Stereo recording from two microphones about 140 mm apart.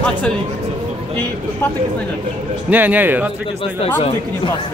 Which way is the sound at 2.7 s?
15° right (ahead or behind).